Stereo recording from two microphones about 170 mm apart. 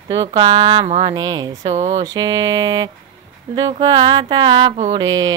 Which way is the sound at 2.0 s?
25° right (ahead or behind).